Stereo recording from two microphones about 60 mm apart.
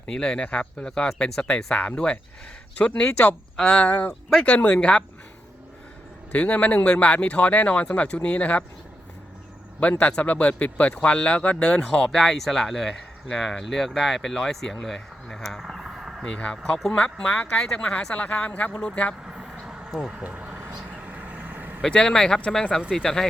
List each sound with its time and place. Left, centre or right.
0.0 s speech: centre
6.3 s speech: left
10.0 s speech: left; by 15.6 s centre
15.6 s a sound: centre
16.2 s speech: centre
19.2 s vehicle: centre
19.5 s a sound: centre
20.2 s vehicle: right
21.8 s speech: centre